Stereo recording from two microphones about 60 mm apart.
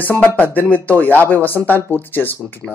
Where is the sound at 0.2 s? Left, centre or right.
Left.